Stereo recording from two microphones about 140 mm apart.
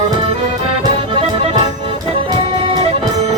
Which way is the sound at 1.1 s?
40° right (ahead or behind).